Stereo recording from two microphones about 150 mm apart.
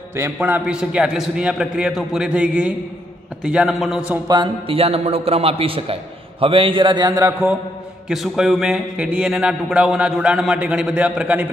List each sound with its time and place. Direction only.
0.1 s a man's voice: 15° right (ahead or behind)
4.3 s a man's voice: 35° right (ahead or behind)
8.1 s speech: centre (ahead or behind)